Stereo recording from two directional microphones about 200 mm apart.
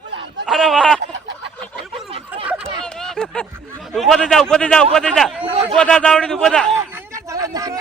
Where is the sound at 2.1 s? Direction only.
30° right (ahead or behind).